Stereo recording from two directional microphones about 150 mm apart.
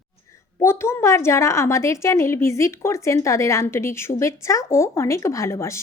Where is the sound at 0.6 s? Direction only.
15° left (ahead or behind).